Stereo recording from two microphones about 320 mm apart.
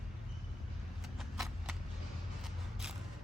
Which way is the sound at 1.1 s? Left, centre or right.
Centre.